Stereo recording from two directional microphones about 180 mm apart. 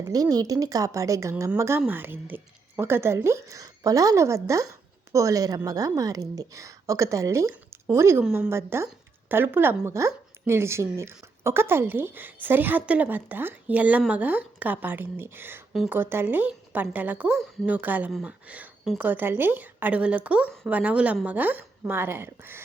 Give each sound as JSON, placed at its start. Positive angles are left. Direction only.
{"t": 0.0, "sound": "speech", "side_deg": -20}